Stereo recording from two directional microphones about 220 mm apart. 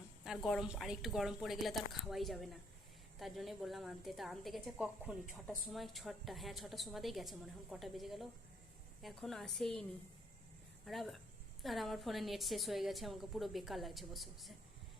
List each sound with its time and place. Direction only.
0.3 s a woman's voice: centre (ahead or behind)
10.8 s a woman's voice: centre (ahead or behind)